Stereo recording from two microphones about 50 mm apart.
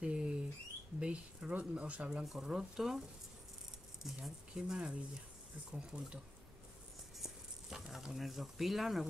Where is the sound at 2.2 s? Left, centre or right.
Centre.